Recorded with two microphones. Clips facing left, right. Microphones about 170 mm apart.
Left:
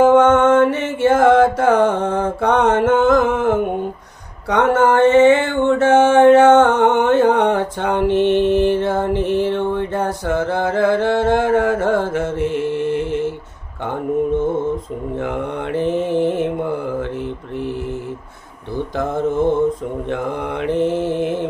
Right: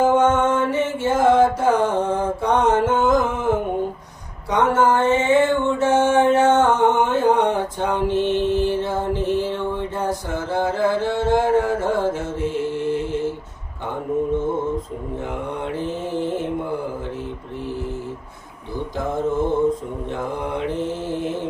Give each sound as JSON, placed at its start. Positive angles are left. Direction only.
{"t": 0.0, "sound": "mantra", "side_deg": 70}
{"t": 15.8, "sound": "mantra", "side_deg": 65}
{"t": 20.6, "sound": "mantra", "side_deg": 65}